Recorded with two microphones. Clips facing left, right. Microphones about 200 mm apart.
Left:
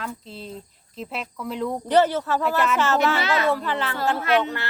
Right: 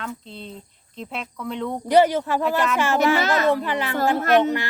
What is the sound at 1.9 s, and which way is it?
Speech, 15° right (ahead or behind).